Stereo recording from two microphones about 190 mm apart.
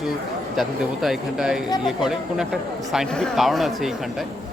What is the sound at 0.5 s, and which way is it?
Speech, centre (ahead or behind).